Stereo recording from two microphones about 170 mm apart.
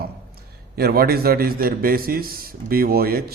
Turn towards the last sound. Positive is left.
turn(degrees=-65)  # may be behind; listen again after turning